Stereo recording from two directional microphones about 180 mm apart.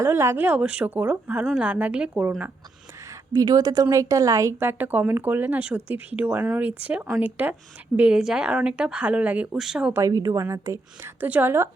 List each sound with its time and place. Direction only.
0.0 s a woman's voice: 15° right (ahead or behind)
3.1 s a woman's voice: 20° right (ahead or behind); by 10.0 s 5° right (ahead or behind)
10.0 s a woman's voice: 20° right (ahead or behind)